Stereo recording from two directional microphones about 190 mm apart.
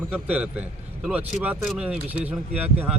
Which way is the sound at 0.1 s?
10° right (ahead or behind).